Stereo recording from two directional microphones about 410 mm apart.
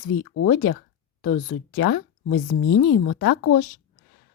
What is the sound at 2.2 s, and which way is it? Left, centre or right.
Speech, left.